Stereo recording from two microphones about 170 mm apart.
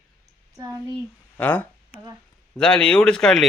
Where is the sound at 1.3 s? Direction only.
10° left (ahead or behind).